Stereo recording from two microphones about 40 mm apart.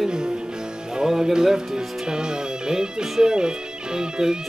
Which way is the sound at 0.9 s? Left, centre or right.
Centre.